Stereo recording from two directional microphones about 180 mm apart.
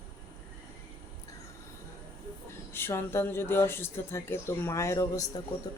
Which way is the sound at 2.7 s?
15° left (ahead or behind).